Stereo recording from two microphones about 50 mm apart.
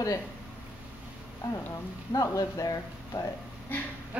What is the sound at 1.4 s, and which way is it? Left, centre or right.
Speech, left.